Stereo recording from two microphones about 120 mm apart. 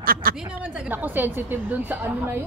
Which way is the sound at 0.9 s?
15° right (ahead or behind).